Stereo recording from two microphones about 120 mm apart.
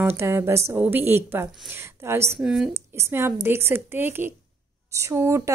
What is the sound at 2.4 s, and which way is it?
Speech, 5° right (ahead or behind).